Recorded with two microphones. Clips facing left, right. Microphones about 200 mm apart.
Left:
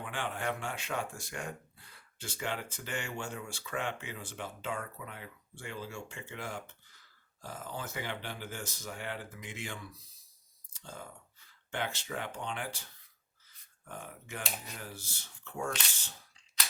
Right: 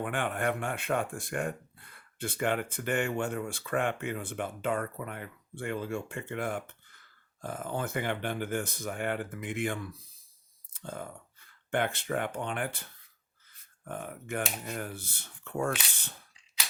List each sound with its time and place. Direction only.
0.0 s speech: 55° right (ahead or behind)